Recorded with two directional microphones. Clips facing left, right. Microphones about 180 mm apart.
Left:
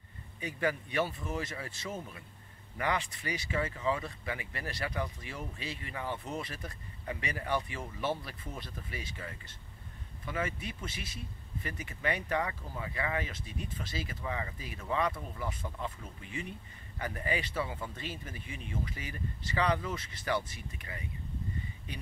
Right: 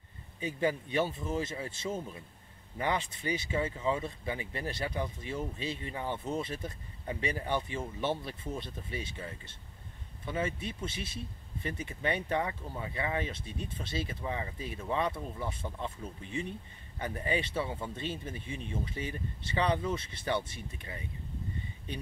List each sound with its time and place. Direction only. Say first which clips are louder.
0.4 s speech: right 2 dB; 25° right (ahead or behind)